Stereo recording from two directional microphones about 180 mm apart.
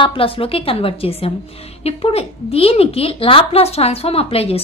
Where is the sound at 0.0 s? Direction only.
30° left (ahead or behind).